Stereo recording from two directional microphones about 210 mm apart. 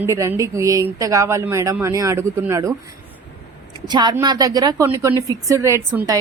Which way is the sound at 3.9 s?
20° right (ahead or behind).